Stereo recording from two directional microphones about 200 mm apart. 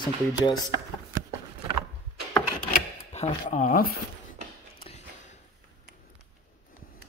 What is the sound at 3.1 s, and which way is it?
Speech, 35° left (ahead or behind).